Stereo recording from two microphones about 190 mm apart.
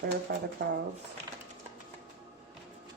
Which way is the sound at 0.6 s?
75° right (ahead or behind).